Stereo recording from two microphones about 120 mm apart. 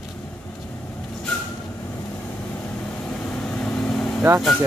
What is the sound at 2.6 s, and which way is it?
Vehicle, 10° left (ahead or behind).